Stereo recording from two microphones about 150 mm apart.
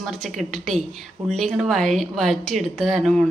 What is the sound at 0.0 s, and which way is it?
A woman's voice, centre (ahead or behind).